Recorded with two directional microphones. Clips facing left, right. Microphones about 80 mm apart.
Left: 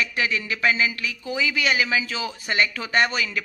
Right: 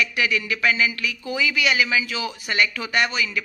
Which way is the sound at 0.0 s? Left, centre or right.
Left.